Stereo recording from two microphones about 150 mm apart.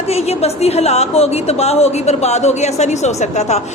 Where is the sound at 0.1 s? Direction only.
45° left (ahead or behind).